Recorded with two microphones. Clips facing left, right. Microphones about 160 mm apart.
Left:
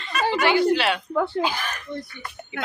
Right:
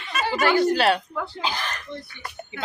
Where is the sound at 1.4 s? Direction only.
10° left (ahead or behind).